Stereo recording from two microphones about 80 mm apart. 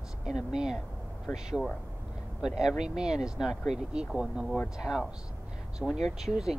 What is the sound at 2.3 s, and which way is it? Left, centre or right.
Speech, centre.